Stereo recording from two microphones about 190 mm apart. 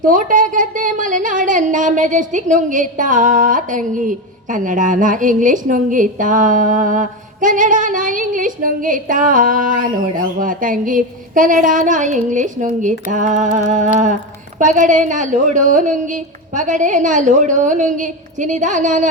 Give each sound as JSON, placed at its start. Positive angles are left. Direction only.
{"t": 0.0, "sound": "a woman's voice", "side_deg": -45}